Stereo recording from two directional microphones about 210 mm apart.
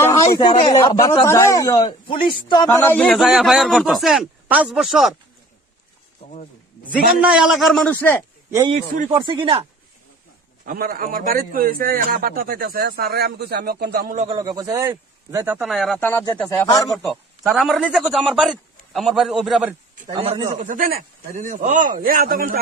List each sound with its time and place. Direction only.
0.0 s a sound: 15° left (ahead or behind)
0.7 s a man's voice: 20° left (ahead or behind); by 5.1 s centre (ahead or behind)
7.2 s a man's voice: 5° right (ahead or behind)
8.4 s speech: 15° right (ahead or behind)
8.7 s speech: 30° right (ahead or behind)
10.7 s a man's voice: 45° right (ahead or behind)
14.3 s speech: 15° right (ahead or behind); by 17.0 s 15° left (ahead or behind)
17.1 s a man's voice: centre (ahead or behind)
20.1 s speech: 25° right (ahead or behind)
20.6 s speech: 40° right (ahead or behind)